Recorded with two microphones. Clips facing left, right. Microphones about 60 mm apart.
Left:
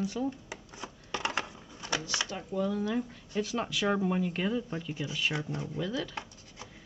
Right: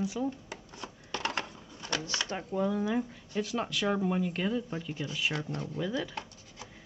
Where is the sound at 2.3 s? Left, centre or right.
Right.